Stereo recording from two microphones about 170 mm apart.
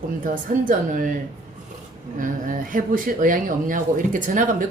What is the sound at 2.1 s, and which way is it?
Speech, 50° right (ahead or behind).